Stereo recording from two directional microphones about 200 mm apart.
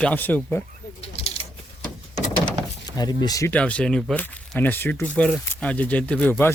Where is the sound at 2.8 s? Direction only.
20° left (ahead or behind).